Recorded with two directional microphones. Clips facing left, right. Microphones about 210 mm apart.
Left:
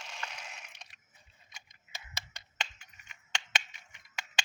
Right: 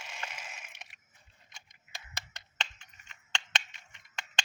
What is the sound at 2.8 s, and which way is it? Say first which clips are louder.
Typing: even; 5° left (ahead or behind).